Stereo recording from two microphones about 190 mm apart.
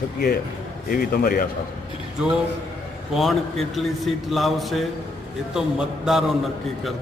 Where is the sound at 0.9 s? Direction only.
50° left (ahead or behind).